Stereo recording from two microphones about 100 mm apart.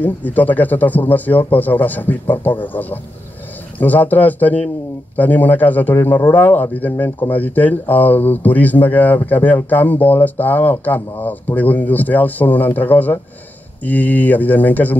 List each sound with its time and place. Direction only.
0.0 s a man's voice: 15° left (ahead or behind)